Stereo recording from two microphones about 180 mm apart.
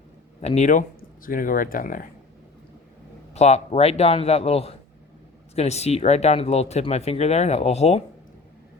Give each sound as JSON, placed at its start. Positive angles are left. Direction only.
{"t": 0.4, "sound": "speech", "side_deg": 40}
{"t": 3.3, "sound": "speech", "side_deg": 40}